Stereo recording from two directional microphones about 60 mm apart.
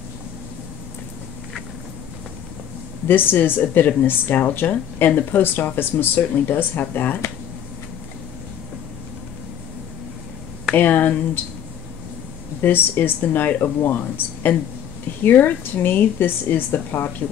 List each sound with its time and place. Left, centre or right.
3.1 s speech: left
10.8 s speech: left
12.6 s speech: left